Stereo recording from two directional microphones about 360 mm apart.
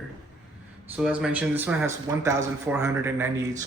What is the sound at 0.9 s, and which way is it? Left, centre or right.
A man's voice, centre.